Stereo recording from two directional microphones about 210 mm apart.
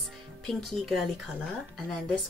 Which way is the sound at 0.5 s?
Centre (ahead or behind).